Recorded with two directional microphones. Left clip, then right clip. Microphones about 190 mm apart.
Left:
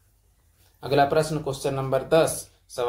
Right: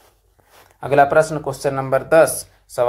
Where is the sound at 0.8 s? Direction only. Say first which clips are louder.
Right 7 dB; 15° right (ahead or behind).